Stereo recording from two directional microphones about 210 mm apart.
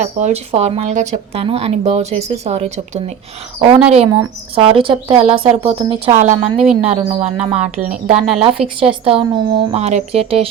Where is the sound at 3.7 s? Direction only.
5° right (ahead or behind).